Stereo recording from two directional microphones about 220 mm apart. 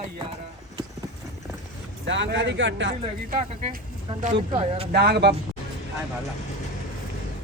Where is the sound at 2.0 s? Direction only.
55° right (ahead or behind).